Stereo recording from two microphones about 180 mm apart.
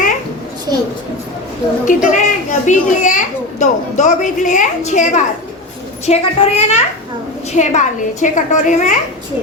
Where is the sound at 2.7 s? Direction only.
45° left (ahead or behind).